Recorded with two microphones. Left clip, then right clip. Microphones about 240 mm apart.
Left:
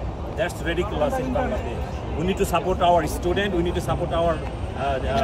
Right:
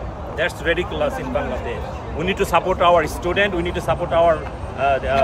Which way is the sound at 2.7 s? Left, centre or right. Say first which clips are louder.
Right 2 dB; right.